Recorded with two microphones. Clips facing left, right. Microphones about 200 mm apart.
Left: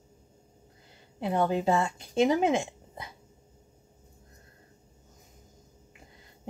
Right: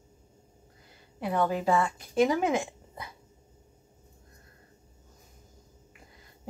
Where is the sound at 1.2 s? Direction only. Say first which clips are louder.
Left 1 dB; 25° left (ahead or behind).